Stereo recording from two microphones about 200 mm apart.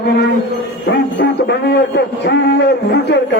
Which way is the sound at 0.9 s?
55° left (ahead or behind).